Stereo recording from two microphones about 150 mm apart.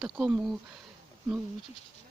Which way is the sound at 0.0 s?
5° right (ahead or behind).